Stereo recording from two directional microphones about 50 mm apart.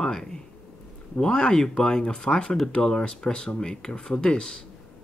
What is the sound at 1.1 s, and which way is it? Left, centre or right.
Speech, centre.